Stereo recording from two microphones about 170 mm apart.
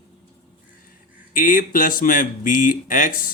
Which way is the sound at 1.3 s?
55° left (ahead or behind).